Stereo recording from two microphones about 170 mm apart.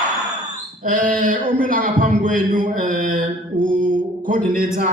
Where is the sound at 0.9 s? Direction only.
55° right (ahead or behind).